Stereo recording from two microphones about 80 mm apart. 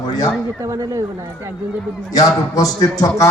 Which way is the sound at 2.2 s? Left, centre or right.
Left.